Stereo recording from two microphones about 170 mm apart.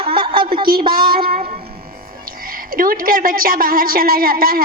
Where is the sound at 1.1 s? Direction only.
60° right (ahead or behind).